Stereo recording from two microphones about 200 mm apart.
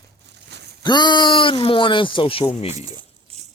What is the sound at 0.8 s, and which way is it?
Speech, 20° left (ahead or behind).